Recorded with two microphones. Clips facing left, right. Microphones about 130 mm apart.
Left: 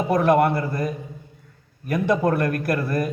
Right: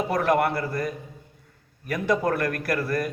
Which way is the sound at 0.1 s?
25° left (ahead or behind).